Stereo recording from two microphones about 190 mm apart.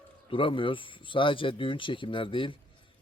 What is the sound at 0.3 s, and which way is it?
Speech, 25° left (ahead or behind).